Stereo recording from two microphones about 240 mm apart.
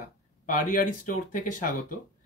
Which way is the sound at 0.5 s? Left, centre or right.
Left.